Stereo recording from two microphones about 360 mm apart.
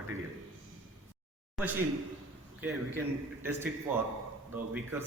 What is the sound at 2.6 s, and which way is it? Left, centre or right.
Speech, centre.